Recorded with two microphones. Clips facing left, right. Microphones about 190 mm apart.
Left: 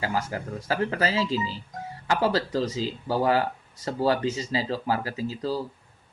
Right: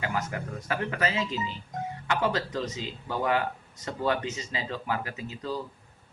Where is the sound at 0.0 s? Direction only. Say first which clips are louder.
Left 3 dB; 35° left (ahead or behind).